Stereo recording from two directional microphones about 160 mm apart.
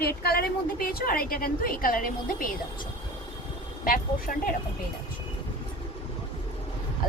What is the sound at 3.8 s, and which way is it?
Speech, 55° left (ahead or behind).